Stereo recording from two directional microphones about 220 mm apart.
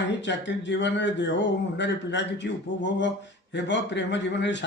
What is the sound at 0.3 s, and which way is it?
A man's voice, 55° left (ahead or behind).